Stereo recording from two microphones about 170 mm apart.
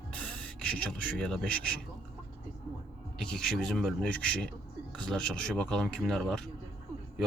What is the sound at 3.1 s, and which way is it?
Speech, 5° left (ahead or behind).